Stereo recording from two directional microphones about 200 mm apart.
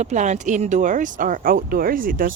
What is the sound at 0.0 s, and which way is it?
Speech, 35° right (ahead or behind).